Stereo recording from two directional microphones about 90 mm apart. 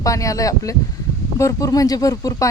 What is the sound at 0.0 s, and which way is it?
Speech, 40° left (ahead or behind).